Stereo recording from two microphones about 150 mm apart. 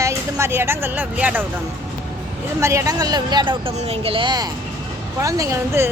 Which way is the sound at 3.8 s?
40° right (ahead or behind).